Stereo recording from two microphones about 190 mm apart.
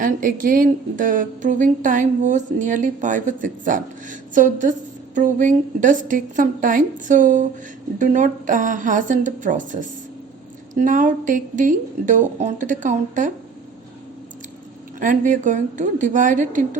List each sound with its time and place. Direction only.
0.0 s a woman's voice: 45° right (ahead or behind)
10.8 s a woman's voice: 40° right (ahead or behind)
14.9 s a woman's voice: 45° right (ahead or behind)